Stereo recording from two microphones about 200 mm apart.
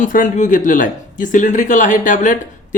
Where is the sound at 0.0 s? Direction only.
40° left (ahead or behind).